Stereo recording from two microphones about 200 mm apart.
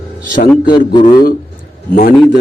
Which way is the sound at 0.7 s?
25° left (ahead or behind).